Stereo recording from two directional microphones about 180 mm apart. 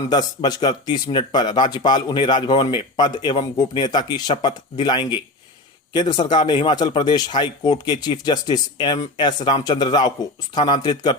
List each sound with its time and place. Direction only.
0.1 s speech: 25° left (ahead or behind)